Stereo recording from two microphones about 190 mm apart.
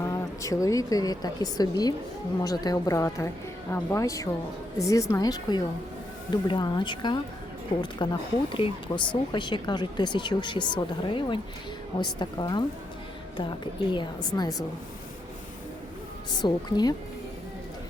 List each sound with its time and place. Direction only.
0.0 s a woman's voice: 15° left (ahead or behind)
13.9 s speech: 20° left (ahead or behind)
16.4 s speech: 20° left (ahead or behind)